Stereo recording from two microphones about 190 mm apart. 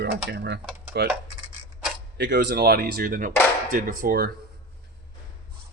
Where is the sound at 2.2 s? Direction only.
65° right (ahead or behind).